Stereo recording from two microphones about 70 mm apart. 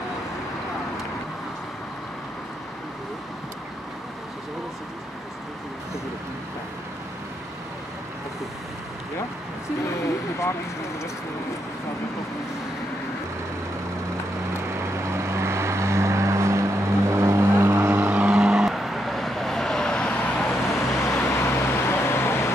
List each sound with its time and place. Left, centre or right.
14.8 s vehicle: right
18.3 s vehicle: centre
20.7 s vehicle: left